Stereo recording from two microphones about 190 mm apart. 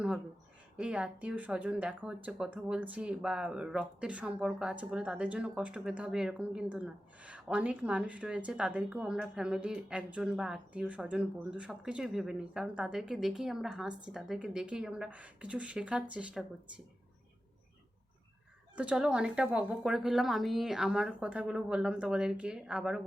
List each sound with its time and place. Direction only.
0.8 s a woman's voice: 5° right (ahead or behind)
18.8 s a woman's voice: 5° right (ahead or behind)